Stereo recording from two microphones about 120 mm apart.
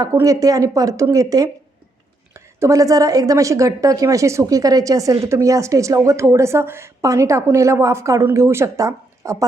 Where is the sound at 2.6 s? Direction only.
25° right (ahead or behind).